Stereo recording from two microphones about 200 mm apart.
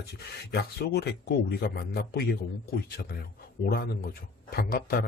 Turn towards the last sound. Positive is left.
turn(degrees=50)  # may be behind; listen again after turning